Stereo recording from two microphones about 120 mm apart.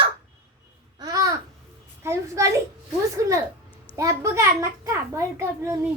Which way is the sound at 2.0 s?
25° right (ahead or behind).